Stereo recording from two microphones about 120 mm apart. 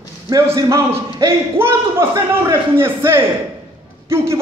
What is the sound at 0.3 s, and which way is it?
A man's voice, 25° right (ahead or behind).